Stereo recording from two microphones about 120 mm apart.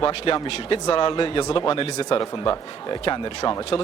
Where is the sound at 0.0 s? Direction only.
45° left (ahead or behind).